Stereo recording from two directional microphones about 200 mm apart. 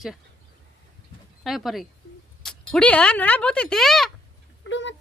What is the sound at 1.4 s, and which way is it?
Speech, centre (ahead or behind).